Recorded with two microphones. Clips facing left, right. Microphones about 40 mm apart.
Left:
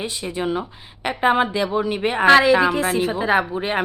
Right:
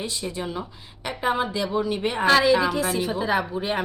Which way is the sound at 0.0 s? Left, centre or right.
Left.